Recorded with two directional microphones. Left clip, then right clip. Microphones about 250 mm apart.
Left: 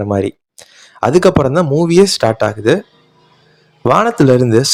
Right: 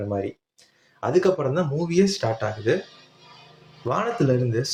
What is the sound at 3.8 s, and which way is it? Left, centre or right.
Speech, left.